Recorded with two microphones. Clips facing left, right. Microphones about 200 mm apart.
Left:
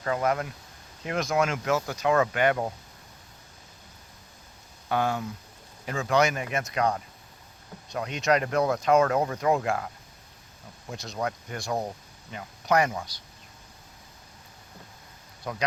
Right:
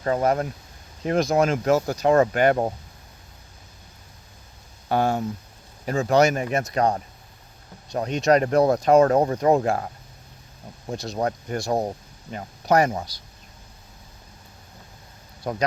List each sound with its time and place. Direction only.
0.0 s speech: 35° right (ahead or behind)
4.9 s speech: 35° right (ahead or behind)
15.5 s speech: 40° right (ahead or behind)